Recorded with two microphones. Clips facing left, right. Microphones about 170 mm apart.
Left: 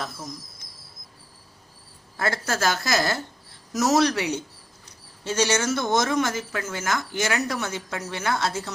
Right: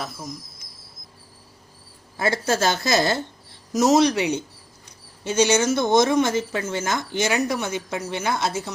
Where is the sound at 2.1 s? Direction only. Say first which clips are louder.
Right 4 dB; 20° right (ahead or behind).